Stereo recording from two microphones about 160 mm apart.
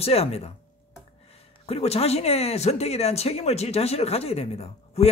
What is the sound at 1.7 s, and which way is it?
Speech, 40° left (ahead or behind).